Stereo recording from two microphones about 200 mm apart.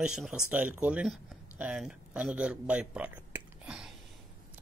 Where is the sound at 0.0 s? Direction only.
5° right (ahead or behind).